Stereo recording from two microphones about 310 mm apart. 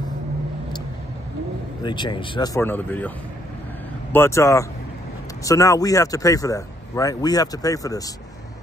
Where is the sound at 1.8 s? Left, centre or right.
Centre.